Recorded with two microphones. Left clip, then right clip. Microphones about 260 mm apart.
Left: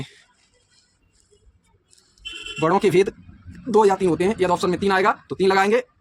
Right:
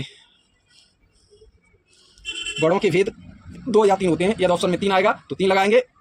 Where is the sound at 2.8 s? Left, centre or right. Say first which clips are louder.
Left 2 dB; left.